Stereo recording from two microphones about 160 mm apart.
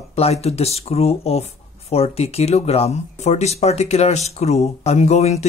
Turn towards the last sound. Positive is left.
turn(degrees=45)  # may be behind; listen again after turning